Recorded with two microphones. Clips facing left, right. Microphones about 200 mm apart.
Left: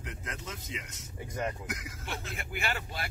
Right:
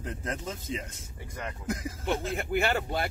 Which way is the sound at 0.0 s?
30° right (ahead or behind).